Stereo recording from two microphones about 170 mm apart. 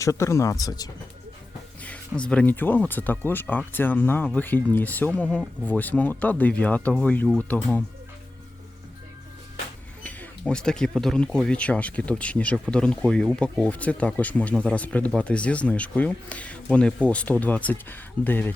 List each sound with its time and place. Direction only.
0.0 s speech: 15° left (ahead or behind)
1.8 s speech: 5° left (ahead or behind)
10.0 s speech: 10° left (ahead or behind)